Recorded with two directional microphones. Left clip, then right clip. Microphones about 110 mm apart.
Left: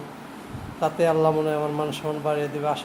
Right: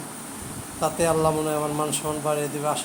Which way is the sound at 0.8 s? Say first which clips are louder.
Left 1 dB; 25° left (ahead or behind).